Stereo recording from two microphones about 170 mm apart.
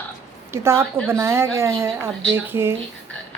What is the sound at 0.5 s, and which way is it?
A woman's voice, 15° right (ahead or behind).